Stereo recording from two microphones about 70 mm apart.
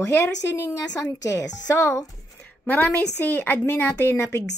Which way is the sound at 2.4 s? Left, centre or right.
Left.